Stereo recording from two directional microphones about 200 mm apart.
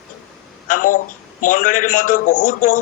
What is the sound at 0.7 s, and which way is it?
A man's voice, 40° left (ahead or behind).